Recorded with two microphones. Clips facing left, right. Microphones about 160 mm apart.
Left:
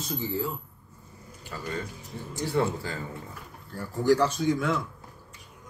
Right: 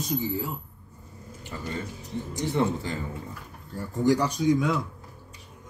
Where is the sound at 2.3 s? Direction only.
20° right (ahead or behind).